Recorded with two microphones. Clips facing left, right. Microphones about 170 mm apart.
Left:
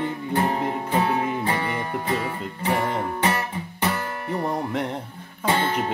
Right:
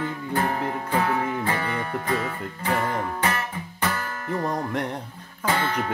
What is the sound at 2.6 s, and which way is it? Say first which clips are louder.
Speech: left 1 dB; 15° left (ahead or behind).